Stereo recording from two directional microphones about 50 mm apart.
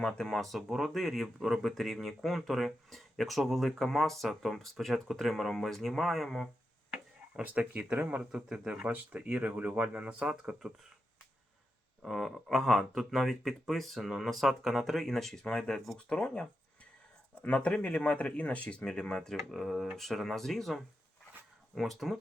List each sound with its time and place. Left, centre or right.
0.0 s speech: centre
0.3 s speech: centre
7.5 s speech: right
8.2 s a man's voice: centre
8.9 s speech: right
12.0 s speech: centre; by 16.4 s left
17.4 s speech: left; by 22.2 s centre